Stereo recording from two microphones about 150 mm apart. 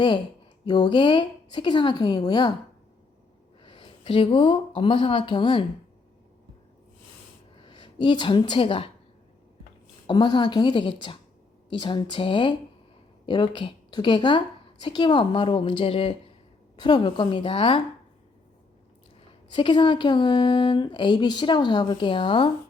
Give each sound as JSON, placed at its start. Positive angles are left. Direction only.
{"t": 0.6, "sound": "a woman's voice", "side_deg": 30}
{"t": 3.6, "sound": "speech", "side_deg": 35}
{"t": 7.6, "sound": "speech", "side_deg": 35}
{"t": 10.1, "sound": "speech", "side_deg": 30}
{"t": 19.5, "sound": "speech", "side_deg": 35}